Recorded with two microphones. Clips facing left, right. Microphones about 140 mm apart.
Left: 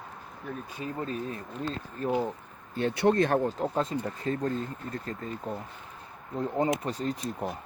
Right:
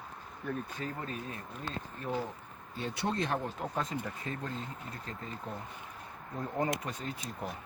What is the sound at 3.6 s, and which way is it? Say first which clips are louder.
Speech: left 7 dB; 35° left (ahead or behind).